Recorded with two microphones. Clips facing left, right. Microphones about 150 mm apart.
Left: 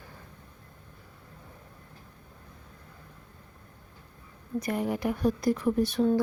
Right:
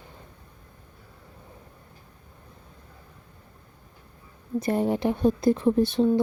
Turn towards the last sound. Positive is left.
turn(degrees=-25)  # may be behind; listen again after turning